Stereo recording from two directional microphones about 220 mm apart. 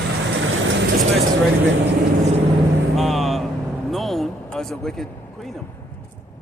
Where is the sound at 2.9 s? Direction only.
Centre (ahead or behind).